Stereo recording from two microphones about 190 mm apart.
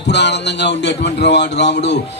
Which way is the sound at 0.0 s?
65° left (ahead or behind).